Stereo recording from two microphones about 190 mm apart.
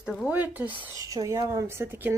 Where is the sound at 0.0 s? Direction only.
Centre (ahead or behind).